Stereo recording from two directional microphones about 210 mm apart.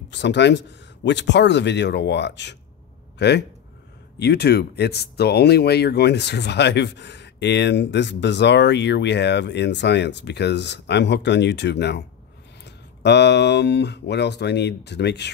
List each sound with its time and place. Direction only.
0.1 s a man's voice: 55° left (ahead or behind)